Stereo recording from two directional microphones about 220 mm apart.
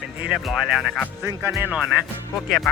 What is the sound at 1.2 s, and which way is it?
Speech, 10° right (ahead or behind).